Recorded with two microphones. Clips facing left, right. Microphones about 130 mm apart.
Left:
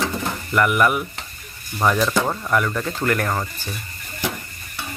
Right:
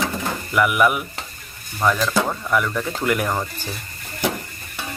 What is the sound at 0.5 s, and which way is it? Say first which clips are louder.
Speech: even; 5° right (ahead or behind).